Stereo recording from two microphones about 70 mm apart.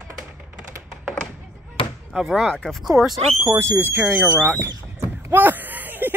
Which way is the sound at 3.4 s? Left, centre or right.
Right.